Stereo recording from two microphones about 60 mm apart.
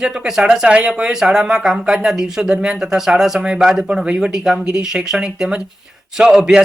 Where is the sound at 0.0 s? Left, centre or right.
Centre.